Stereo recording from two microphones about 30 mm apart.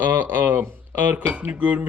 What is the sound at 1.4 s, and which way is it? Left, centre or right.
Speech, right.